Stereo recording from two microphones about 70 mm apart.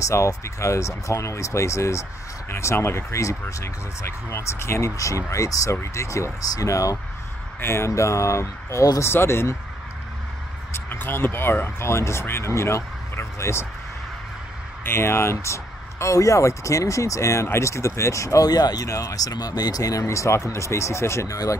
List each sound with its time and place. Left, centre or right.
0.0 s speech: left
7.6 s speech: left
10.7 s speech: left
14.8 s speech: left
18.5 s speech: left
18.9 s speech: left